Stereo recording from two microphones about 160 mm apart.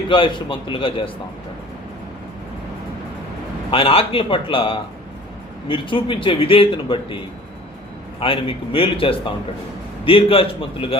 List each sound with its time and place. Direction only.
0.1 s a man's voice: 30° left (ahead or behind)
3.7 s a man's voice: 35° left (ahead or behind)
8.2 s a man's voice: 35° left (ahead or behind)